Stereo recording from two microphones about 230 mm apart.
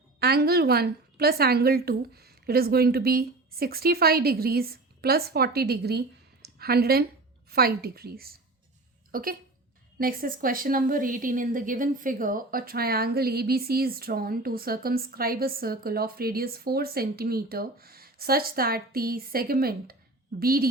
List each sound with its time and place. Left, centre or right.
0.2 s a woman's voice: right